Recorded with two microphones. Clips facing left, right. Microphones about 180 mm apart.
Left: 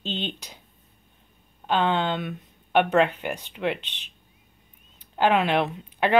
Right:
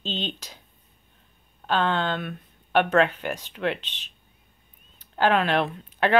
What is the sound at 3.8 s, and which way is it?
Speech, 60° left (ahead or behind).